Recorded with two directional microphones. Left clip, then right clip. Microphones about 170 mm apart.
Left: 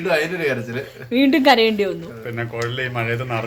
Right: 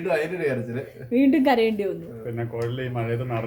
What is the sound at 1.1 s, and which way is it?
Speech, 15° left (ahead or behind).